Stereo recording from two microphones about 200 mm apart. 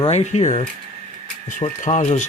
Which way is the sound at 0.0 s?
35° left (ahead or behind).